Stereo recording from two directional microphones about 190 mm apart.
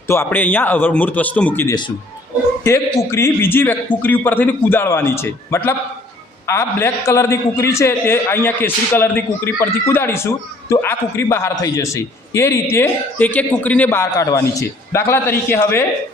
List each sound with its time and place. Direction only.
0.1 s a man's voice: 10° left (ahead or behind)